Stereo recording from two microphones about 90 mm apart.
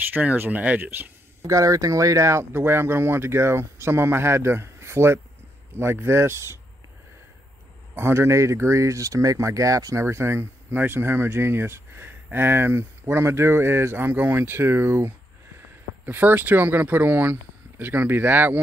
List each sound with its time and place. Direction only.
0.1 s speech: 20° right (ahead or behind)
1.4 s speech: 40° right (ahead or behind)
7.9 s speech: 30° right (ahead or behind)